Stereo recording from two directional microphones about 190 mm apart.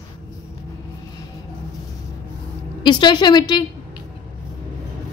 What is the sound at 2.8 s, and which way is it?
Speech, 25° left (ahead or behind).